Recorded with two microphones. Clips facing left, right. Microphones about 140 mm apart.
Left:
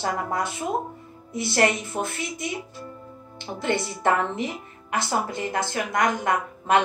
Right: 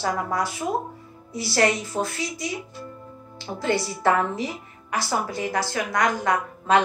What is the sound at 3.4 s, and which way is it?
A woman's voice, 20° left (ahead or behind).